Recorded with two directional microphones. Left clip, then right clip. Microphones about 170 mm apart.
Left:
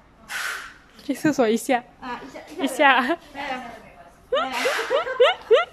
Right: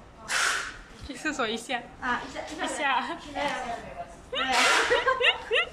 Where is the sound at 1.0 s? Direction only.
40° left (ahead or behind).